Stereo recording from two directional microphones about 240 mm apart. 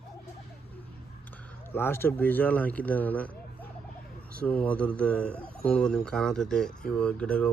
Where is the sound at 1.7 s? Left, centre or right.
Centre.